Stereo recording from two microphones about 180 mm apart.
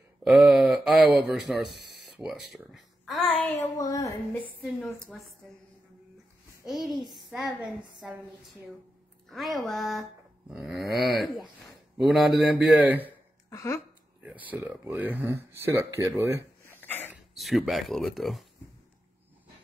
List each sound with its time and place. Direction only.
0.2 s speech: centre (ahead or behind)
2.0 s a sound: centre (ahead or behind)
2.5 s speech: centre (ahead or behind)
3.5 s a woman's voice: 20° left (ahead or behind)
4.6 s speech: 5° left (ahead or behind)
6.6 s speech: centre (ahead or behind)
9.3 s speech: centre (ahead or behind)
13.5 s a sound: 20° left (ahead or behind)
14.5 s speech: 10° right (ahead or behind)
16.6 s cough: 10° left (ahead or behind)
17.1 s speech: centre (ahead or behind)